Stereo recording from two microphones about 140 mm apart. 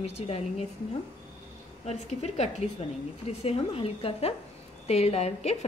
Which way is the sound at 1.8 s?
50° left (ahead or behind).